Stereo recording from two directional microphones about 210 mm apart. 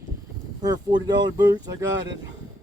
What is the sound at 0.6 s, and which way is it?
Speech, 20° right (ahead or behind).